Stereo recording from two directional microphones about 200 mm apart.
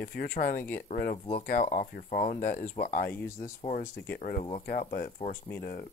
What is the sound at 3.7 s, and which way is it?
Speech, 45° left (ahead or behind).